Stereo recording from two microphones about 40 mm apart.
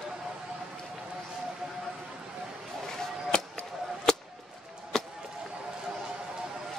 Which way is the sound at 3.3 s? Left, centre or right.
Centre.